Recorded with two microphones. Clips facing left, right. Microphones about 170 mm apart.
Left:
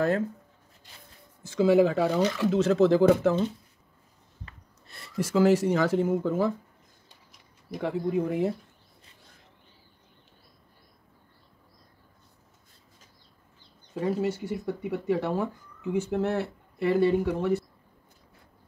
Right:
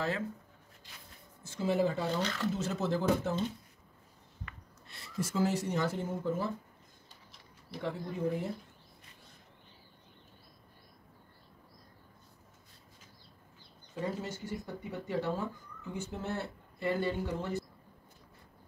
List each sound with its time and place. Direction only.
1.4 s speech: 90° left
4.9 s speech: 70° left (ahead or behind); by 6.5 s 90° left
7.8 s speech: 75° left (ahead or behind)
14.0 s speech: 70° left (ahead or behind)